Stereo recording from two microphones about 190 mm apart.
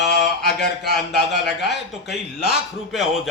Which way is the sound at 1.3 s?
65° left (ahead or behind).